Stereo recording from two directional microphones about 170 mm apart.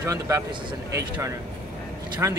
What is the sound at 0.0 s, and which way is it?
Speech, 15° right (ahead or behind).